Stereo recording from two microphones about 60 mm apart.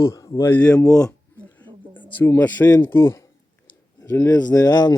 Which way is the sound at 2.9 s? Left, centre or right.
Left.